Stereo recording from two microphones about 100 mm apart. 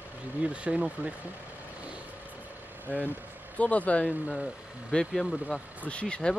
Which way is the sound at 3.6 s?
15° left (ahead or behind).